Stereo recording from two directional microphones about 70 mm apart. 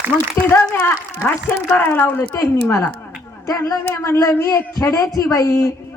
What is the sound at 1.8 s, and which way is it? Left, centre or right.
Speech, left.